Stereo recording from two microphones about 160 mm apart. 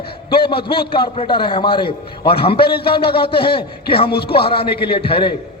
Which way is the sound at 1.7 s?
75° left (ahead or behind).